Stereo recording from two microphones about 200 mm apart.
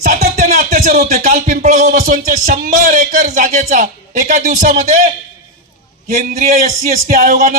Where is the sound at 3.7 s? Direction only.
40° right (ahead or behind).